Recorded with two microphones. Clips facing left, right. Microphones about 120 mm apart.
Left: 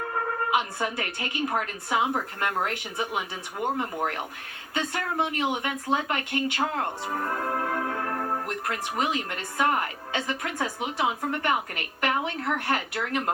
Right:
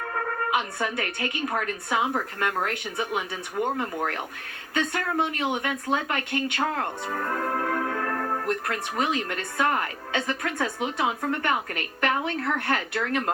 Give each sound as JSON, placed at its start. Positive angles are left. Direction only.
{"t": 0.5, "sound": "speech", "side_deg": 20}